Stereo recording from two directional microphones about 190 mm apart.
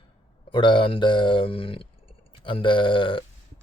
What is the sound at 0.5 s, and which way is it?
Speech, 25° left (ahead or behind).